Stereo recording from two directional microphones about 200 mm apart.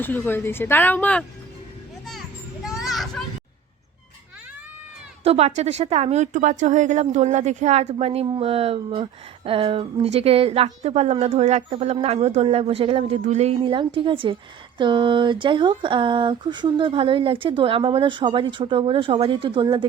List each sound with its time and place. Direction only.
0.0 s speech: 10° left (ahead or behind)
2.6 s children playing: centre (ahead or behind)
5.2 s a woman's voice: 30° right (ahead or behind)